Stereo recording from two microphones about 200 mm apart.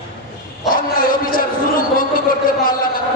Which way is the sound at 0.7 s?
45° left (ahead or behind).